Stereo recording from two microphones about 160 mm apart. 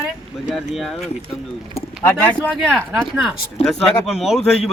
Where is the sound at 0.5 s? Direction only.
Centre (ahead or behind).